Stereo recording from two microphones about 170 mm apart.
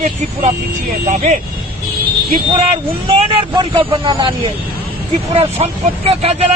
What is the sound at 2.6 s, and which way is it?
Speech, 35° right (ahead or behind).